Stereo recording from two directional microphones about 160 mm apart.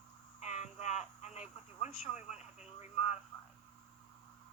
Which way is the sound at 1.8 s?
45° left (ahead or behind).